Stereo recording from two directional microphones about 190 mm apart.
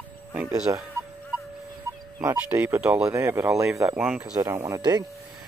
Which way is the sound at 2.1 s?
15° right (ahead or behind).